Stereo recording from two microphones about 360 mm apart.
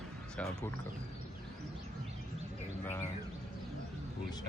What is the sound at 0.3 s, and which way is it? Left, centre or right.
Speech, centre.